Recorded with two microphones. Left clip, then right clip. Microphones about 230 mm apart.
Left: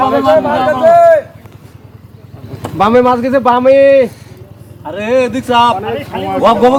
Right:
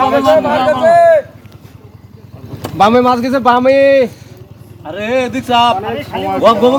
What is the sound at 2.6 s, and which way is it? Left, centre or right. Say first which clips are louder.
Speech: even; right.